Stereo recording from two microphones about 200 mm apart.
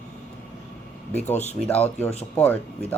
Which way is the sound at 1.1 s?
10° left (ahead or behind).